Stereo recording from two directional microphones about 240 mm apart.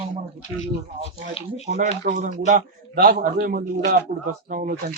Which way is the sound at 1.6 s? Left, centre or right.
Right.